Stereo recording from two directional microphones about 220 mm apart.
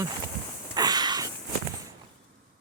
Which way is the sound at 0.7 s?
20° right (ahead or behind).